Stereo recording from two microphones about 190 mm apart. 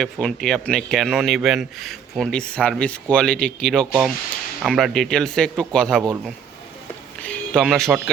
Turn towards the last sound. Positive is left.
turn(degrees=0)  # may be behind; listen again after turning